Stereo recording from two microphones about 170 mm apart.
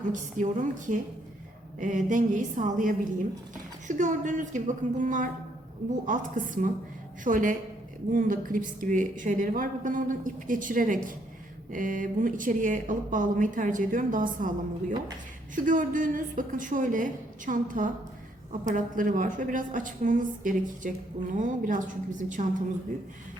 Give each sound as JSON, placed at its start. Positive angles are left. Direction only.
{"t": 0.1, "sound": "speech", "side_deg": -50}
{"t": 1.8, "sound": "speech", "side_deg": -50}